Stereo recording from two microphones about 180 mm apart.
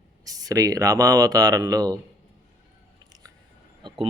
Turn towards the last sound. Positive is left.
turn(degrees=-25)  # may be behind; listen again after turning